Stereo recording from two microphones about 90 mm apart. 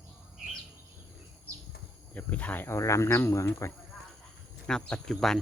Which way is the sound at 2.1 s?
15° left (ahead or behind).